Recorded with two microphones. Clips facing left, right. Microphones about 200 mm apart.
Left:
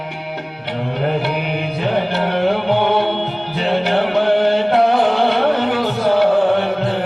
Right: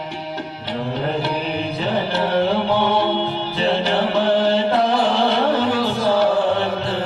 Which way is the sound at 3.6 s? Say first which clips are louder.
Left 2 dB; 60° left (ahead or behind).